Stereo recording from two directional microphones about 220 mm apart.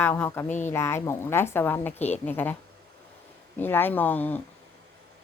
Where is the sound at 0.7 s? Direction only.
10° left (ahead or behind).